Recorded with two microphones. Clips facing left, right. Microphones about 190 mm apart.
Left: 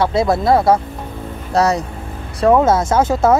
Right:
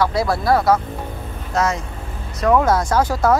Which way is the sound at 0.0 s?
25° left (ahead or behind).